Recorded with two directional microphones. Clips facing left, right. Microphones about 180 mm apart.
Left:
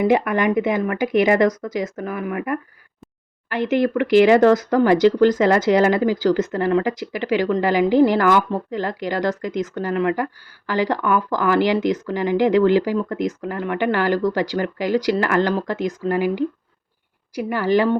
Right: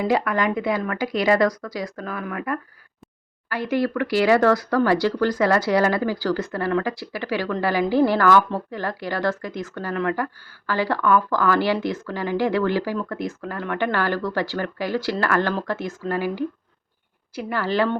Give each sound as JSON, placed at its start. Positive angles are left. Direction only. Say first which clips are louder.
{"t": 0.0, "sound": "speech", "louder": "left 4 dB", "side_deg": 20}